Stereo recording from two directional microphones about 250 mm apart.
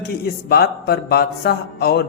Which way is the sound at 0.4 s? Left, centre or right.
Left.